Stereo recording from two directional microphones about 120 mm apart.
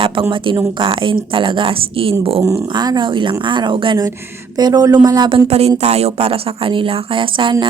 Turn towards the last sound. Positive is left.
turn(degrees=-45)  # may be behind; listen again after turning